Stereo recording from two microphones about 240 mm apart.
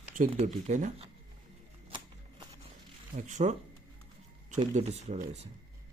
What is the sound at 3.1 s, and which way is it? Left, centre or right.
Speech, right.